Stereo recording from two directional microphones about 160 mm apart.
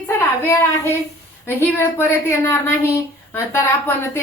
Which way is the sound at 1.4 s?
15° left (ahead or behind).